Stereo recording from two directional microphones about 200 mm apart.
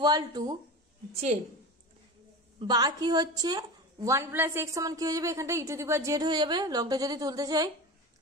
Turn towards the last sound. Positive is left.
turn(degrees=-20)  # may be behind; listen again after turning